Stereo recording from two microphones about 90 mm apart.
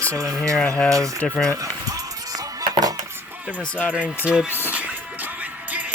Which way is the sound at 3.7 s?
15° left (ahead or behind).